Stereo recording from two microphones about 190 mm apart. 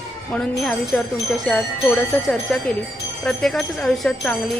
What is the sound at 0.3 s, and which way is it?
Speech, 5° left (ahead or behind).